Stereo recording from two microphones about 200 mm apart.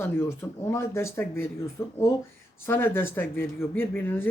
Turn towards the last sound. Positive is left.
turn(degrees=10)  # may be behind; listen again after turning